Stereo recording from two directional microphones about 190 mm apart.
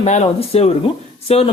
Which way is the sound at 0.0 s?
35° left (ahead or behind).